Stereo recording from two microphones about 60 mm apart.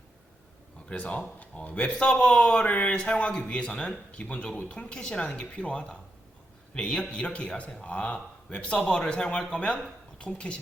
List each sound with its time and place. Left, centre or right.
0.9 s a man's voice: left